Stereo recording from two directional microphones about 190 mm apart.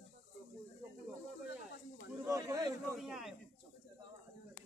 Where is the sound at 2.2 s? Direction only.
15° right (ahead or behind).